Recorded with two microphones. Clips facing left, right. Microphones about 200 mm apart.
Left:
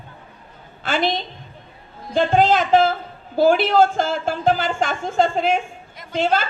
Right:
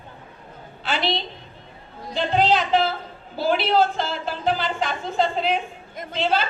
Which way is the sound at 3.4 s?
50° left (ahead or behind).